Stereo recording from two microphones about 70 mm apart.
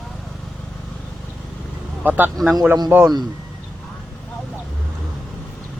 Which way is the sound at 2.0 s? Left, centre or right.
Right.